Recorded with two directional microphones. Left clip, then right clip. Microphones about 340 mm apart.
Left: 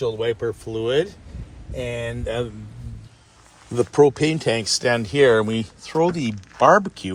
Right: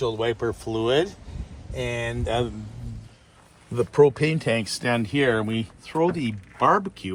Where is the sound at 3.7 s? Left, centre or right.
Centre.